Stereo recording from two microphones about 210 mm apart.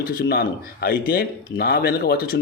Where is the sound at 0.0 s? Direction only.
45° left (ahead or behind).